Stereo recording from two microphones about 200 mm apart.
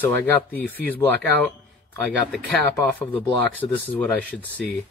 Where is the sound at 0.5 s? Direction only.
10° left (ahead or behind).